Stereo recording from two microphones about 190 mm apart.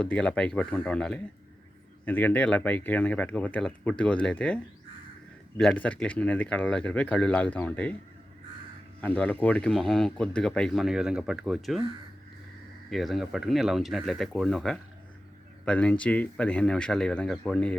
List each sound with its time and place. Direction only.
0.0 s speech: 5° left (ahead or behind)
9.0 s speech: 5° left (ahead or behind)
12.9 s speech: centre (ahead or behind)